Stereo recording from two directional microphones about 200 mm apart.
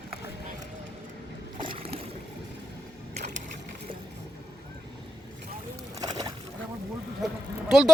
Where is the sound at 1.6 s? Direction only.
25° right (ahead or behind).